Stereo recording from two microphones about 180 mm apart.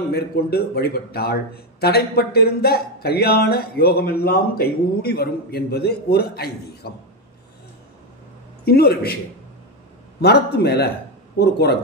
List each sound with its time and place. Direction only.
0.1 s a man's voice: 60° left (ahead or behind)
8.6 s a man's voice: 60° left (ahead or behind)
10.2 s a man's voice: 65° left (ahead or behind)